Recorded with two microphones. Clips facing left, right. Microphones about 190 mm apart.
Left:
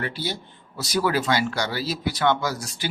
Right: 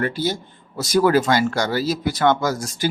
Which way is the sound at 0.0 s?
45° right (ahead or behind).